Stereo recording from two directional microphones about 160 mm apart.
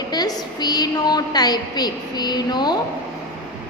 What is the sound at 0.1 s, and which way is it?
A woman's voice, 25° left (ahead or behind).